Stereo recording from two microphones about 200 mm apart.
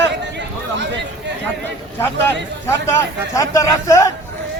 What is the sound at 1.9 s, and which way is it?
A man's voice, 10° left (ahead or behind).